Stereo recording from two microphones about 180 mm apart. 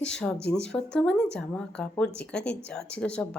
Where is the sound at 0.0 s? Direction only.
5° left (ahead or behind).